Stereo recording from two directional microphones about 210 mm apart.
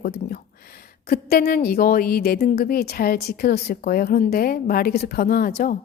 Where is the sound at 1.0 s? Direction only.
45° left (ahead or behind).